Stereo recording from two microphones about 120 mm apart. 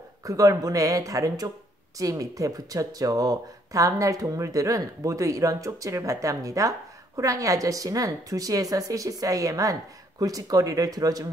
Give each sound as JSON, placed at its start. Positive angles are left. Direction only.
{"t": 0.2, "sound": "speech", "side_deg": -30}